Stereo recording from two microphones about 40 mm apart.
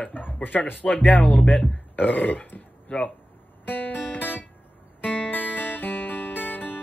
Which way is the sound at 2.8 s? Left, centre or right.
Left.